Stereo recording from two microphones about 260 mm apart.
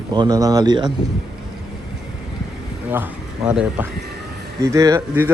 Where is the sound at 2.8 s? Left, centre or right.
Centre.